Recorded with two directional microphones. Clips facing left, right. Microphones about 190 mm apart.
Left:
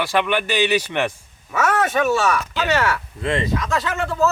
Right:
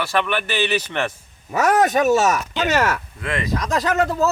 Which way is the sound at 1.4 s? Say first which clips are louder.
Right 3 dB; 40° right (ahead or behind).